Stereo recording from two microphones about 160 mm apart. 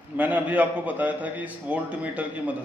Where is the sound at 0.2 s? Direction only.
10° right (ahead or behind).